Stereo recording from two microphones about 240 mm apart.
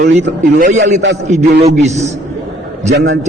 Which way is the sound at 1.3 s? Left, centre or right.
Right.